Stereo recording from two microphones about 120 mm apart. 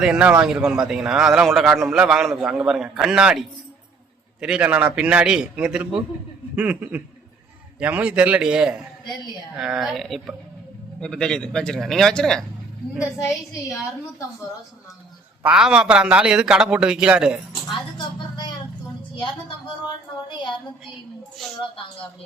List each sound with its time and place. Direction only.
0.0 s a man's voice: 5° right (ahead or behind)
15.4 s a man's voice: 5° right (ahead or behind)
17.5 s a sound: 40° left (ahead or behind)
20.2 s a woman's voice: 40° left (ahead or behind)